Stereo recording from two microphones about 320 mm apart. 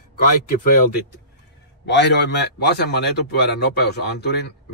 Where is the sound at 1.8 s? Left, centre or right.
Left.